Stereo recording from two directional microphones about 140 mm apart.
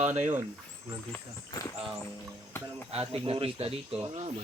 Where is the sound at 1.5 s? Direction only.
25° left (ahead or behind).